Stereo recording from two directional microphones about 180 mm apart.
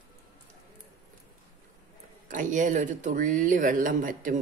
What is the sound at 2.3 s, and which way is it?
Speech, 45° right (ahead or behind).